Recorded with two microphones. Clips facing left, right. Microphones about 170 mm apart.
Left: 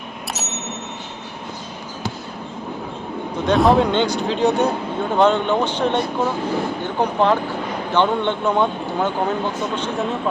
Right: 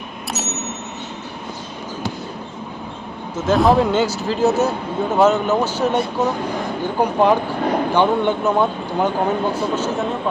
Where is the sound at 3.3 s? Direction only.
Centre (ahead or behind).